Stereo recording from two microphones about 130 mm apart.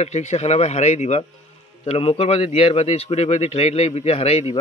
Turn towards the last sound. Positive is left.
turn(degrees=50)  # may be behind; listen again after turning